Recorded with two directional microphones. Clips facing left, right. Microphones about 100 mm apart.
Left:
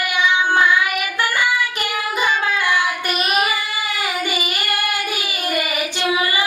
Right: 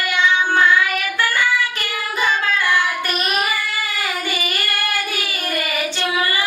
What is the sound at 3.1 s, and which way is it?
Child singing, 5° left (ahead or behind).